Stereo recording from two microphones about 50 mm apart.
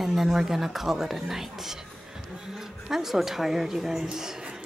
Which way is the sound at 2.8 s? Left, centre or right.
Centre.